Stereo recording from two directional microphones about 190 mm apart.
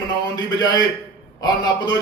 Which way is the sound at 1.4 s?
20° left (ahead or behind).